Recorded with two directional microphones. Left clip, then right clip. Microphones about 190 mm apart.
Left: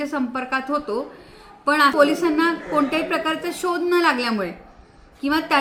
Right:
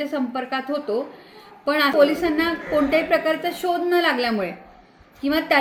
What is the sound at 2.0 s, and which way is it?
A woman's voice, 15° left (ahead or behind).